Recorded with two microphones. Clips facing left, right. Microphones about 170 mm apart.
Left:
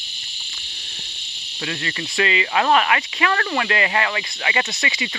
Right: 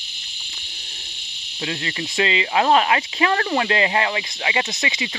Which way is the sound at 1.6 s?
20° right (ahead or behind).